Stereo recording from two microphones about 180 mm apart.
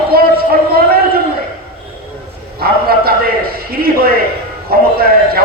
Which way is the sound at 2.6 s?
60° right (ahead or behind).